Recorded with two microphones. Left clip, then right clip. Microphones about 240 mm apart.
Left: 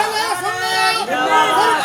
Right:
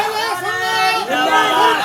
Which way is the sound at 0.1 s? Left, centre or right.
Centre.